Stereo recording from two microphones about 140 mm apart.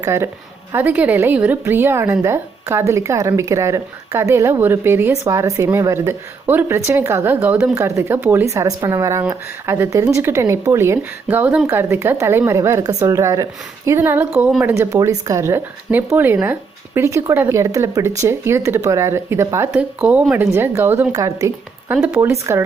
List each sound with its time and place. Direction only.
0.0 s a woman's voice: 20° right (ahead or behind)
21.9 s a woman's voice: 10° right (ahead or behind)